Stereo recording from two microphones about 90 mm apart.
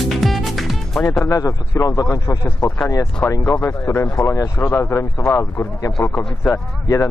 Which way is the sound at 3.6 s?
35° left (ahead or behind).